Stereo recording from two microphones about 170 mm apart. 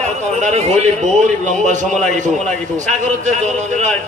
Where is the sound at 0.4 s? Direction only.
40° right (ahead or behind).